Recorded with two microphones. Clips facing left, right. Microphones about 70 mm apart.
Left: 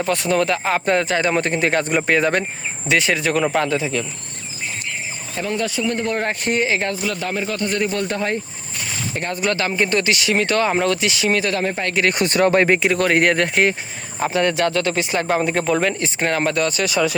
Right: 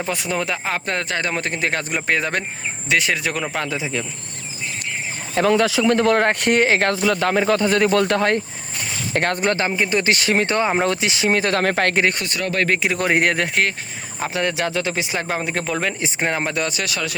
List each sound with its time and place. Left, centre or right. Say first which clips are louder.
0.1 s speech: left 6 dB; centre
5.3 s speech: right 7 dB; right
6.2 s speech: right 3 dB; right
6.9 s speech: right 5 dB; right
9.4 s speech: right 1 dB; right
9.7 s speech: left 1 dB; centre
10.0 s speech: even; right
10.5 s speech: left 1 dB; centre; by 11.5 s right
11.5 s speech: right 3 dB; right
12.3 s speech: left 9 dB; left
12.7 s speech: left 2 dB; centre
16.0 s speech: left 2 dB; centre
16.9 s speech: left 7 dB; centre